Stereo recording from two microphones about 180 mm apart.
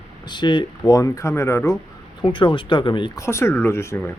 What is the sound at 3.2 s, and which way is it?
Speech, 15° left (ahead or behind).